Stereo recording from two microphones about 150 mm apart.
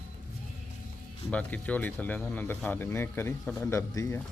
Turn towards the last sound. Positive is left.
turn(degrees=20)  # may be behind; listen again after turning